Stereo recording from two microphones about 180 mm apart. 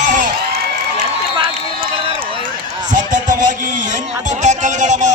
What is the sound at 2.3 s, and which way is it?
Run, 30° right (ahead or behind).